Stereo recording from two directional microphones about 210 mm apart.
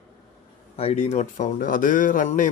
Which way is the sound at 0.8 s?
30° left (ahead or behind).